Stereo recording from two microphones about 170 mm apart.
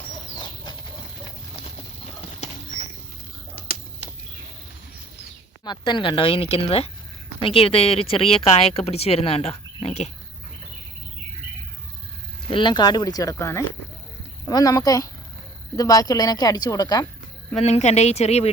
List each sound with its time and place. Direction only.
0.3 s a sound: 25° left (ahead or behind)
2.4 s horse: 55° left (ahead or behind)
5.6 s speech: 25° left (ahead or behind)
12.5 s a woman's voice: 30° left (ahead or behind)
17.6 s speech: 40° left (ahead or behind)